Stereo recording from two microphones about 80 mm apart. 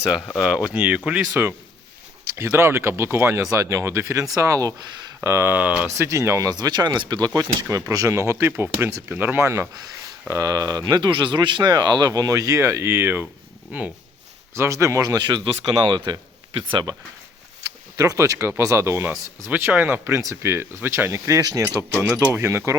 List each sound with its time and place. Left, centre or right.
0.3 s speech: centre; by 5.5 s right
5.5 s speech: centre
6.0 s speech: right
6.5 s speech: right
8.1 s speech: right
11.7 s speech: right
14.5 s speech: right
15.7 s speech: right
17.9 s speech: right
19.5 s speech: right
20.1 s speech: right
22.2 s speech: right